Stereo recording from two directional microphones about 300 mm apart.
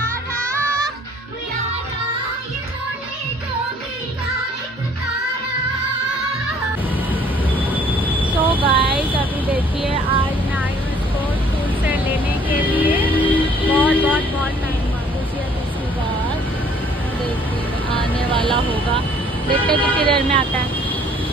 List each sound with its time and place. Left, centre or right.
7.5 s train: centre
8.3 s vehicle: centre
9.8 s a sound: centre
12.4 s vehicle: centre
17.9 s speech: centre
19.8 s speech: centre